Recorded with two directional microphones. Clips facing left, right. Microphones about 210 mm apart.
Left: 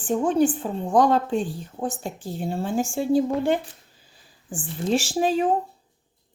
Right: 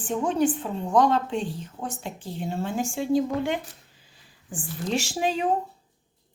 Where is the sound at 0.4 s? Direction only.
35° left (ahead or behind).